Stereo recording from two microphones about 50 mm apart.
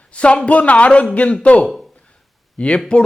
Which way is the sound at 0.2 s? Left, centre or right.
Left.